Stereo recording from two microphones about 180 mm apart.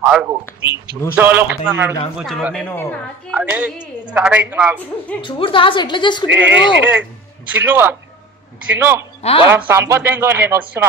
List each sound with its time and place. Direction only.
0.0 s a sound: 5° right (ahead or behind)
0.3 s a man's voice: 15° right (ahead or behind)
2.1 s a man's voice: centre (ahead or behind)
3.3 s a man's voice: 10° right (ahead or behind)
5.2 s a woman's voice: 30° left (ahead or behind)
6.8 s a man's voice: 10° right (ahead or behind)
9.2 s speech: 30° left (ahead or behind)
9.7 s a man's voice: 15° right (ahead or behind)